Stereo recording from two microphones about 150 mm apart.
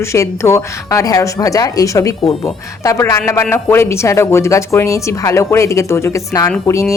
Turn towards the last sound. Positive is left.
turn(degrees=20)  # may be behind; listen again after turning